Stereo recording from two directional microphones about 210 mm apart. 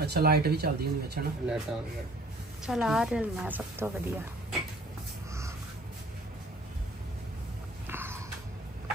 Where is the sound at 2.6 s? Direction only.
Centre (ahead or behind).